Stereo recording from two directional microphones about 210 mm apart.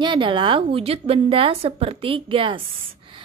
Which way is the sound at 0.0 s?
20° right (ahead or behind).